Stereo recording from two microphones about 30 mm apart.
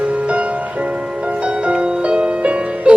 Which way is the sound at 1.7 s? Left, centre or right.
Right.